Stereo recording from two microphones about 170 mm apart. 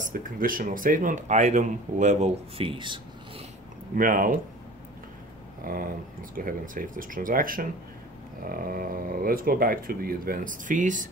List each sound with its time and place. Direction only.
0.0 s speech: 55° right (ahead or behind); by 3.4 s 30° right (ahead or behind)
3.9 s speech: 55° right (ahead or behind)
5.6 s speech: 55° right (ahead or behind)